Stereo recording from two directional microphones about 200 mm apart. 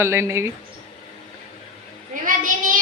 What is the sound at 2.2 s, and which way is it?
Child singing, 40° right (ahead or behind).